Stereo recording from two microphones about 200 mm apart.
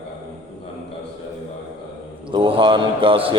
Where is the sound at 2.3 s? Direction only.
25° right (ahead or behind).